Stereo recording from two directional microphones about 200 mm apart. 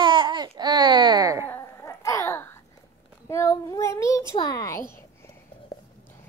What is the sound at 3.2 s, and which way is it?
A child's voice, 15° left (ahead or behind).